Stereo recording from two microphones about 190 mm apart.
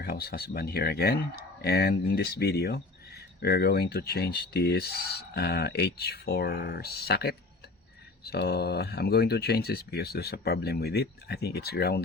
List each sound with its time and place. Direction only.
0.0 s speech: 55° left (ahead or behind)